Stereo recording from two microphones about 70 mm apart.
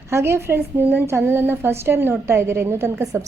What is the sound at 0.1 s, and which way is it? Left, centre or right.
A woman's voice, right.